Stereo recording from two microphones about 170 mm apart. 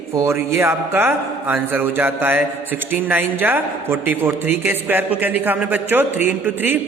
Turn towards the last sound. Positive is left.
turn(degrees=-10)  # may be behind; listen again after turning